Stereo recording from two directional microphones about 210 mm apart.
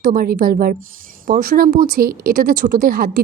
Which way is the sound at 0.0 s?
45° right (ahead or behind).